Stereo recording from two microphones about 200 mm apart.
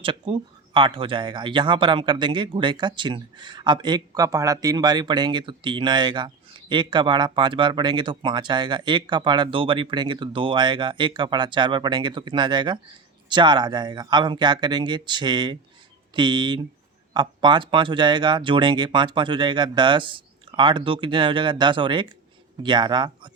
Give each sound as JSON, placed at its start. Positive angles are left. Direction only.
{"t": 0.0, "sound": "speech", "side_deg": -25}